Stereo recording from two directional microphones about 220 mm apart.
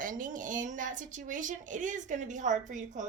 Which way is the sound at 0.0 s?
35° right (ahead or behind).